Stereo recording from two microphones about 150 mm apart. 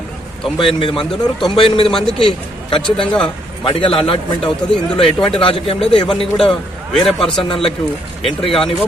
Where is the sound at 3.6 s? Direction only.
35° left (ahead or behind).